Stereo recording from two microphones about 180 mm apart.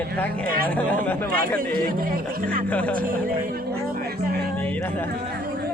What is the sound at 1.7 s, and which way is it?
Speech, 55° right (ahead or behind).